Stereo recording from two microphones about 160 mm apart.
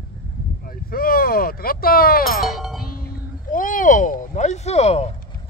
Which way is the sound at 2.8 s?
65° left (ahead or behind).